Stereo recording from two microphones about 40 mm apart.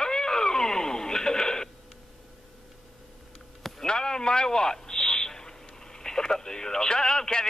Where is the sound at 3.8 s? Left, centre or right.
Centre.